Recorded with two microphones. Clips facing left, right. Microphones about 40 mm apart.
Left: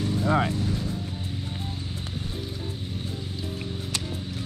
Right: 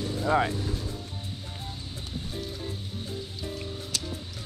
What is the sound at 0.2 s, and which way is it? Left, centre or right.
Speech, centre.